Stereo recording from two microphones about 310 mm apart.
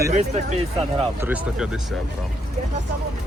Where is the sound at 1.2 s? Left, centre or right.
Centre.